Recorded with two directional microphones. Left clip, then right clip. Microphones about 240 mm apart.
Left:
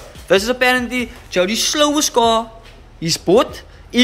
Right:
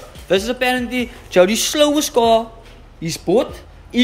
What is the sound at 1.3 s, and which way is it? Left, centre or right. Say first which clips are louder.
A woman's voice: right 3 dB; centre.